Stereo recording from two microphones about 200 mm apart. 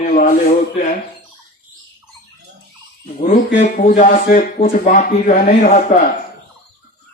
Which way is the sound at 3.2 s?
40° left (ahead or behind).